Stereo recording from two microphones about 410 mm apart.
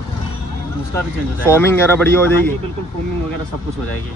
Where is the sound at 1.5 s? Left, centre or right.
Centre.